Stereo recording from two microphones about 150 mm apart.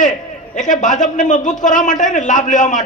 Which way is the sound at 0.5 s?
55° left (ahead or behind).